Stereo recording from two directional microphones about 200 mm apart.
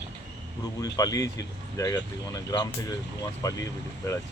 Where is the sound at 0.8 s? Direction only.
20° left (ahead or behind).